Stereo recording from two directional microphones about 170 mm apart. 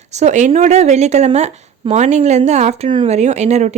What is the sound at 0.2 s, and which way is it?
A woman's voice, 45° right (ahead or behind).